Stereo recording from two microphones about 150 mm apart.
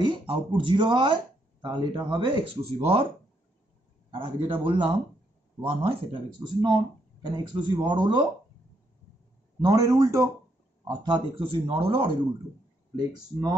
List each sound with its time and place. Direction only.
0.0 s speech: 35° right (ahead or behind)
4.1 s speech: 35° right (ahead or behind)
9.6 s a man's voice: 25° right (ahead or behind)